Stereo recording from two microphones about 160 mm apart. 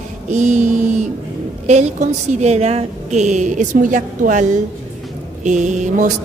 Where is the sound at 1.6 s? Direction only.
45° right (ahead or behind).